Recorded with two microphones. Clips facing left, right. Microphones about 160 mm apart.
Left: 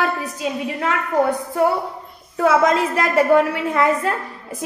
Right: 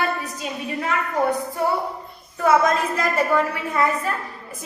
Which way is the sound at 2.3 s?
90° left.